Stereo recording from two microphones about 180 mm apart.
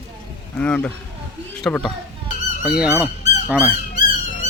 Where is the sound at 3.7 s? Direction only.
50° left (ahead or behind).